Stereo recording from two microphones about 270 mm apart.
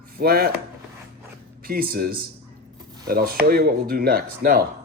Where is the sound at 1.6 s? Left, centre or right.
Right.